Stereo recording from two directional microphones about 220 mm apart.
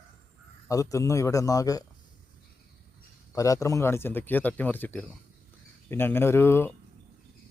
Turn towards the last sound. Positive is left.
turn(degrees=10)  # may be behind; listen again after turning